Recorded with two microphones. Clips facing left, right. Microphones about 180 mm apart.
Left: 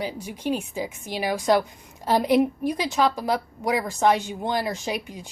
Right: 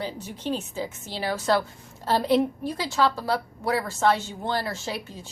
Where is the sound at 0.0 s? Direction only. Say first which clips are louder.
Left 3 dB; 10° left (ahead or behind).